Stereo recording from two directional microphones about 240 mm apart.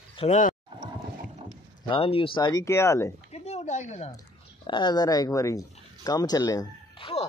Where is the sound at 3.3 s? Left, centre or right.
Left.